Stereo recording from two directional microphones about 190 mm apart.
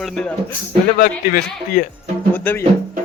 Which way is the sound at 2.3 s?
10° left (ahead or behind).